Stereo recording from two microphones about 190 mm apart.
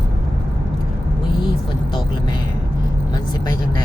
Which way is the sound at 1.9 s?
25° left (ahead or behind).